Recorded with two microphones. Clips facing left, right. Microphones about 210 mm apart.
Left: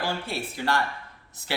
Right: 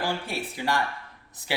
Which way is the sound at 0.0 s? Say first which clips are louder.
Even; 15° right (ahead or behind).